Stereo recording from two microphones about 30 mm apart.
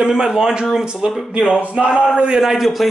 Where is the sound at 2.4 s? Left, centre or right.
Centre.